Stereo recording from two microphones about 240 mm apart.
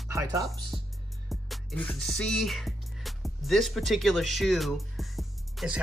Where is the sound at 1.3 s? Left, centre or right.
Centre.